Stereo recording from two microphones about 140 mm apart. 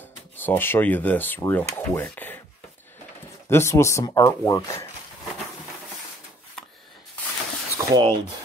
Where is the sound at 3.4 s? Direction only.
20° left (ahead or behind).